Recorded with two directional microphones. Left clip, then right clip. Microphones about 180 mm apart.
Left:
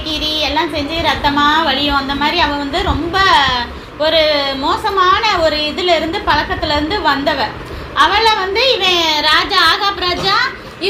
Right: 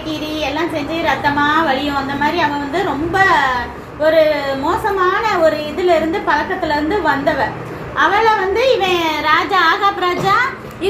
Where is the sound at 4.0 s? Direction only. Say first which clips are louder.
Even; 10° left (ahead or behind).